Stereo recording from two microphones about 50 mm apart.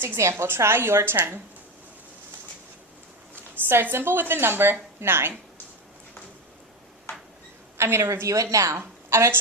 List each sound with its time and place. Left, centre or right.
0.2 s a woman's voice: right
0.4 s a woman's voice: right
3.5 s a woman's voice: right
7.8 s a woman's voice: right
9.0 s a sound: right